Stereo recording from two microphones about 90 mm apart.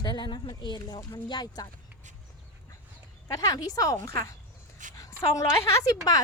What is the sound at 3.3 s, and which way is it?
A woman's voice, 40° left (ahead or behind).